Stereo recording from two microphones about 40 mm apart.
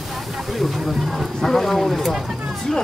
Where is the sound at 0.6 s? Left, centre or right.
Centre.